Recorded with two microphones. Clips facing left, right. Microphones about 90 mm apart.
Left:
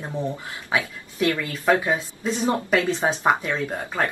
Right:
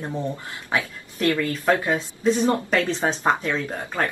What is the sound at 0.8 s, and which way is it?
Speech, 20° left (ahead or behind).